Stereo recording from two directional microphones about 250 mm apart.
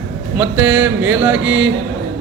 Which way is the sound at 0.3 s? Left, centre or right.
Centre.